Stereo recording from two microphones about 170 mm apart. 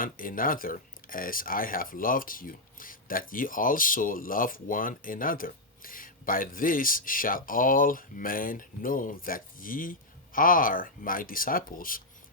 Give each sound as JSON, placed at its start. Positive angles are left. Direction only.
{"t": 0.0, "sound": "speech", "side_deg": 55}